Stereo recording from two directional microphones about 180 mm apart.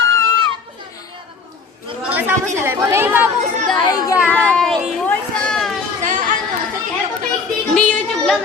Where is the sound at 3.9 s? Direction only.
20° left (ahead or behind).